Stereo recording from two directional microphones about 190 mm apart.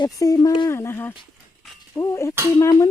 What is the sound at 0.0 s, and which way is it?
Speech, 20° left (ahead or behind).